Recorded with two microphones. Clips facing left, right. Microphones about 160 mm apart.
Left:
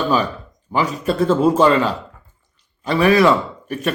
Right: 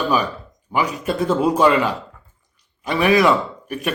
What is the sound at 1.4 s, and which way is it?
Speech, 35° left (ahead or behind).